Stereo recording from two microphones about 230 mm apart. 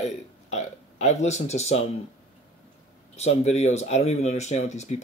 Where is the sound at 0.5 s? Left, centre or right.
Left.